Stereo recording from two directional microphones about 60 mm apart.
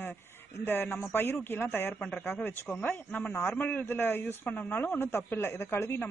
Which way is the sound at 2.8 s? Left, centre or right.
Left.